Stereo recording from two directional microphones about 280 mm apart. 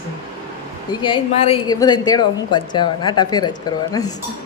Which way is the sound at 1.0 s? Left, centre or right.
Centre.